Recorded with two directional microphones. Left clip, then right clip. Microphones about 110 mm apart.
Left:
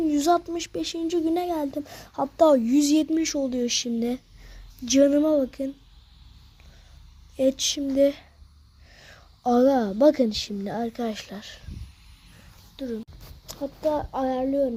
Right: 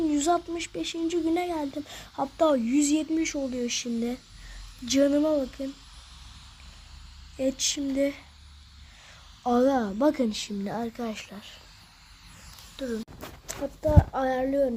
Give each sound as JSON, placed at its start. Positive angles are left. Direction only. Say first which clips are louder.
{"t": 0.0, "sound": "speech", "louder": "left 3 dB", "side_deg": 35}
{"t": 2.4, "sound": "speech", "louder": "left 5 dB", "side_deg": 30}
{"t": 4.9, "sound": "speech", "louder": "left 4 dB", "side_deg": 25}
{"t": 7.3, "sound": "a woman's voice", "louder": "left 5 dB", "side_deg": 30}
{"t": 10.6, "sound": "speech", "louder": "left 1 dB", "side_deg": 15}
{"t": 10.9, "sound": "speech", "louder": "left 4 dB", "side_deg": 35}
{"t": 12.7, "sound": "speech", "louder": "even", "side_deg": 5}
{"t": 13.5, "sound": "speech", "louder": "left 1 dB", "side_deg": 20}